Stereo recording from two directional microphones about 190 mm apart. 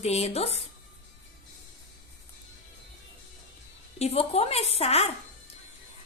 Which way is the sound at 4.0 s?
35° left (ahead or behind).